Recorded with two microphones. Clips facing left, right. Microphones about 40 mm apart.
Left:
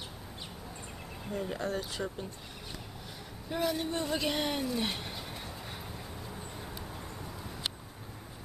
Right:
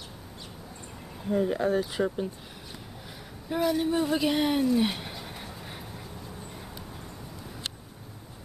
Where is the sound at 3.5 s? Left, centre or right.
Centre.